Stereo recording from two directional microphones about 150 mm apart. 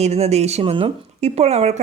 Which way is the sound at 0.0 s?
45° right (ahead or behind).